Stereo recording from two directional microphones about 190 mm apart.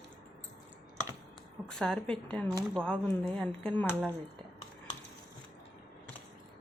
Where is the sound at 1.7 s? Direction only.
Centre (ahead or behind).